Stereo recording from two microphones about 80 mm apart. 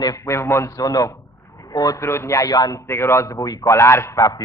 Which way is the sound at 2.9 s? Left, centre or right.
Left.